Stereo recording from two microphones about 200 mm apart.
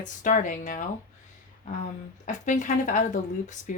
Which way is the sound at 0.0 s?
40° left (ahead or behind).